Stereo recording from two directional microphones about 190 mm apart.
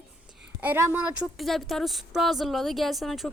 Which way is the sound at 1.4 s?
Centre (ahead or behind).